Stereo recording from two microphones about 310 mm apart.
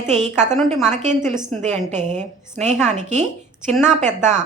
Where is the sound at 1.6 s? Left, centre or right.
Right.